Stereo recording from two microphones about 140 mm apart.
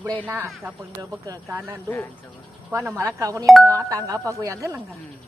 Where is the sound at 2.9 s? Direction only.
25° right (ahead or behind).